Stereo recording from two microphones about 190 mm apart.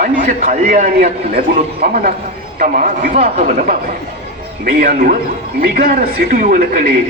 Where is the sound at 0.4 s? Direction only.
45° right (ahead or behind).